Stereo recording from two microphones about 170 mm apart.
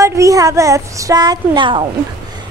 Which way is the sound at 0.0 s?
20° right (ahead or behind).